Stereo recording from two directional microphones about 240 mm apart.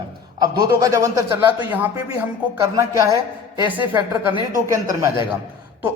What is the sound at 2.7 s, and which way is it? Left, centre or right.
Speech, centre.